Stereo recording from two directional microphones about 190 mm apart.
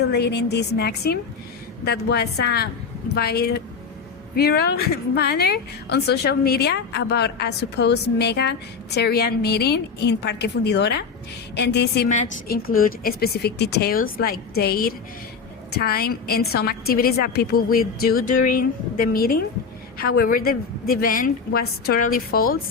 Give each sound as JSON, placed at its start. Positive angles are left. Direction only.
{"t": 0.0, "sound": "a woman's voice", "side_deg": 60}
{"t": 12.0, "sound": "a woman's voice", "side_deg": 40}